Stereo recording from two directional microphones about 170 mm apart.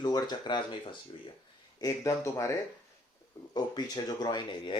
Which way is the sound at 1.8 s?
20° left (ahead or behind).